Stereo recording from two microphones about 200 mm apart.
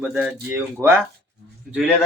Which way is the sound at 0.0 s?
5° right (ahead or behind).